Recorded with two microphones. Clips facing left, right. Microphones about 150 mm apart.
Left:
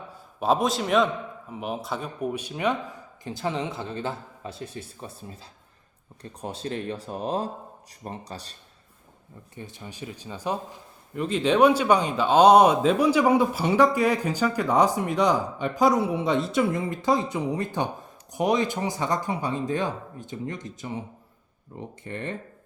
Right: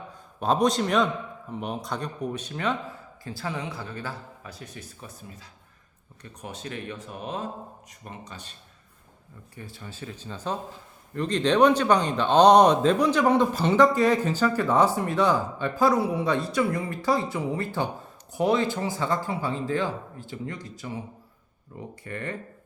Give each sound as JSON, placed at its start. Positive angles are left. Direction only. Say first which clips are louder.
{"t": 0.3, "sound": "speech", "louder": "right 1 dB", "side_deg": 5}
{"t": 9.6, "sound": "speech", "louder": "left 2 dB", "side_deg": 20}